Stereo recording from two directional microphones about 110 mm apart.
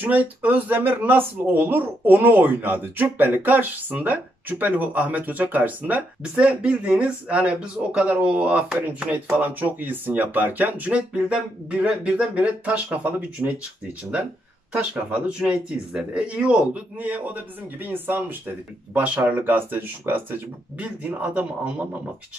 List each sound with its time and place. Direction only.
0.0 s speech: 15° right (ahead or behind)
14.7 s speech: 10° right (ahead or behind)